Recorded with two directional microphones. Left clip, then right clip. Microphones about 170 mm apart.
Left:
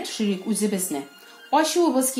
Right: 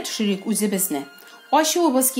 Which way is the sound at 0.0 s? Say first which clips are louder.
Right 2 dB; 45° right (ahead or behind).